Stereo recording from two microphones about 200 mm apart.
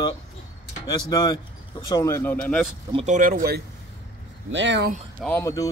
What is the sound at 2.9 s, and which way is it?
Speech, 40° right (ahead or behind).